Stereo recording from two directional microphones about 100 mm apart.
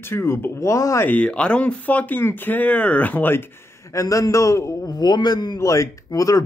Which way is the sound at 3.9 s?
35° left (ahead or behind).